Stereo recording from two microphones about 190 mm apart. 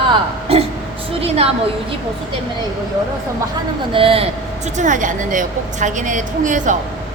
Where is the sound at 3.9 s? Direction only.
30° right (ahead or behind).